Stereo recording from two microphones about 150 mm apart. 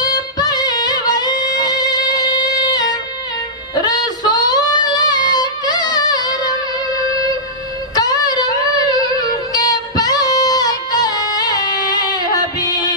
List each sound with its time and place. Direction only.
0.0 s music: 25° left (ahead or behind)
7.9 s child singing: 25° left (ahead or behind)